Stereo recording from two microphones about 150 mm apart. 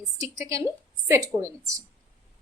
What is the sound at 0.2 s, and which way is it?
A woman's voice, 20° right (ahead or behind).